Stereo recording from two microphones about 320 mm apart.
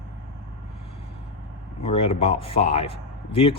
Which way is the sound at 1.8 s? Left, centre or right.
Centre.